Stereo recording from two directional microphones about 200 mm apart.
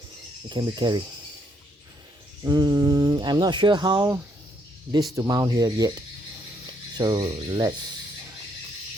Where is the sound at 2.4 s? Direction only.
20° right (ahead or behind).